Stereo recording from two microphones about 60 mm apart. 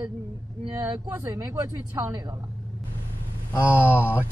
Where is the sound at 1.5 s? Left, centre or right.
Right.